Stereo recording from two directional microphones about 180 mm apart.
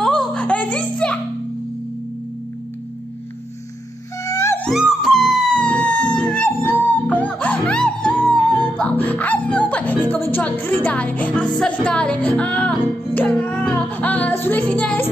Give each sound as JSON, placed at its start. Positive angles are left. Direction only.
{"t": 0.0, "sound": "music", "side_deg": 0}
{"t": 4.2, "sound": "music", "side_deg": 20}
{"t": 4.6, "sound": "dog", "side_deg": 0}
{"t": 12.4, "sound": "music", "side_deg": 5}